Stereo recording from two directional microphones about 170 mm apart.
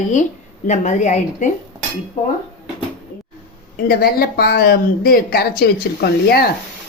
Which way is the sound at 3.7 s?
65° left (ahead or behind).